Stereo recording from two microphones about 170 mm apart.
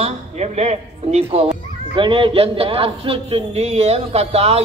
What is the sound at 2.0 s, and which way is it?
Speech, 30° right (ahead or behind).